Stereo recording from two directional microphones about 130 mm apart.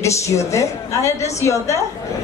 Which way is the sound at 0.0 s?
25° left (ahead or behind).